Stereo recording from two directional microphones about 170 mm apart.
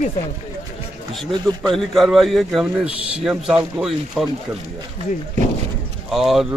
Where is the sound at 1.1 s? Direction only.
Centre (ahead or behind).